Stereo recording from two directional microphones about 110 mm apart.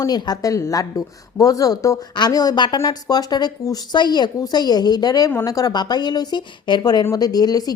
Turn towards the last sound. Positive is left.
turn(degrees=35)  # may be behind; listen again after turning